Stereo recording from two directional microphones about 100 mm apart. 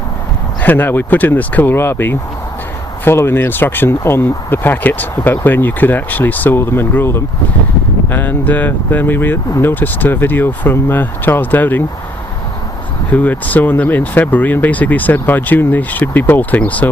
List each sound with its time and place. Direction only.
0.6 s speech: 15° left (ahead or behind)
13.1 s speech: 15° left (ahead or behind)